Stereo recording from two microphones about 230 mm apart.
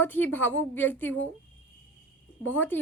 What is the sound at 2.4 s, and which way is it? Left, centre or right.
Speech, centre.